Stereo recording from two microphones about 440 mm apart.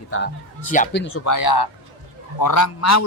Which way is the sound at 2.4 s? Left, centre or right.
Left.